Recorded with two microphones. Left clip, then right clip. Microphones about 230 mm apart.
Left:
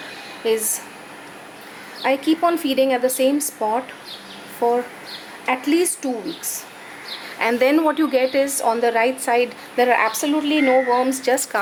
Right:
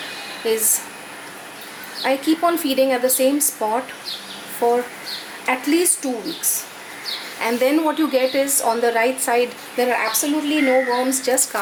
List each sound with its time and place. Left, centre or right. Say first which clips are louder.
0.4 s speech: even; centre
2.0 s speech: even; centre
3.6 s a woman's voice: even; centre
7.3 s a woman's voice: left 2 dB; centre